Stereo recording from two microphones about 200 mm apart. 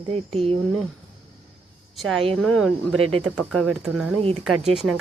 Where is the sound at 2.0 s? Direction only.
Centre (ahead or behind).